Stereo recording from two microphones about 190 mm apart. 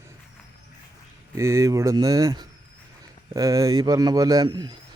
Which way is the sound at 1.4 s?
15° right (ahead or behind).